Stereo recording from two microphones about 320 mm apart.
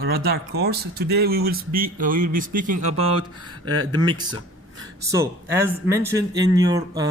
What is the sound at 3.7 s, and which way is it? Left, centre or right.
Speech, right.